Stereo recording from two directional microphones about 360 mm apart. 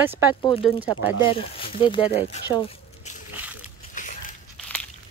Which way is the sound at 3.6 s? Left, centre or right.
Left.